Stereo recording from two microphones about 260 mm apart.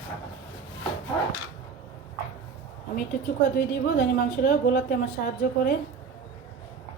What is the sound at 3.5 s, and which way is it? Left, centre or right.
A woman's voice, left.